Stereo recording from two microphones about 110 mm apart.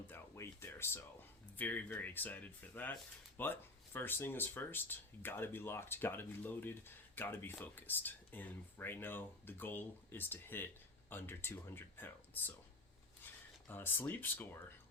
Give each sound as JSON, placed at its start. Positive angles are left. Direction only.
{"t": 0.1, "sound": "a sound", "side_deg": 25}
{"t": 1.5, "sound": "speech", "side_deg": 15}
{"t": 13.7, "sound": "speech", "side_deg": 20}